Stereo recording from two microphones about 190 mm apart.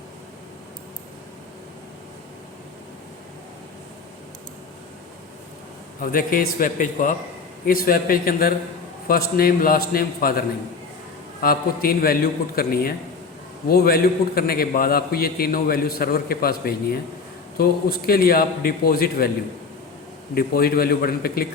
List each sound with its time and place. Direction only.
6.0 s a man's voice: 50° left (ahead or behind)
11.4 s a man's voice: 50° left (ahead or behind)
20.3 s a man's voice: 55° left (ahead or behind)